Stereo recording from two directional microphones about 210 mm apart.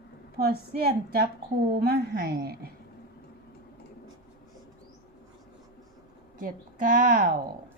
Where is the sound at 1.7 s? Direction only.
50° right (ahead or behind).